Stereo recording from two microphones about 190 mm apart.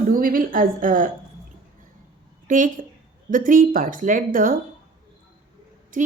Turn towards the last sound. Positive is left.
turn(degrees=-45)  # may be behind; listen again after turning